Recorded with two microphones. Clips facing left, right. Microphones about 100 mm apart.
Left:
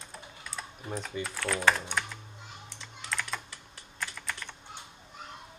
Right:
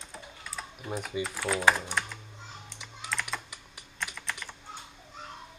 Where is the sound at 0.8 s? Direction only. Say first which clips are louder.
Right 3 dB; 10° right (ahead or behind).